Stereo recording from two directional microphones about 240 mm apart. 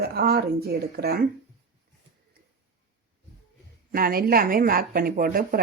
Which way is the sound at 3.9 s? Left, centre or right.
Right.